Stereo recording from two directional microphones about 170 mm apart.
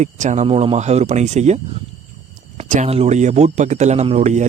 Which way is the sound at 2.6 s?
45° right (ahead or behind).